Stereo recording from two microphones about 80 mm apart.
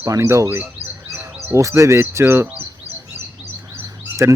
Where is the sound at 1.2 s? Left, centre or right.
Right.